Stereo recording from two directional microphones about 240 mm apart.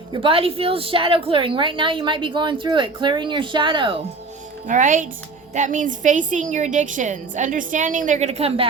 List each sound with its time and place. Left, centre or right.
0.1 s a woman's voice: right
4.6 s a woman's voice: right